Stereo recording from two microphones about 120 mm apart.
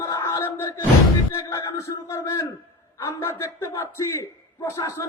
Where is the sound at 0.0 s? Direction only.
20° left (ahead or behind).